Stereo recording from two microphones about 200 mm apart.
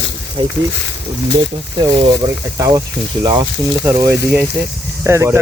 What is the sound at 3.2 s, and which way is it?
Speech, 15° right (ahead or behind).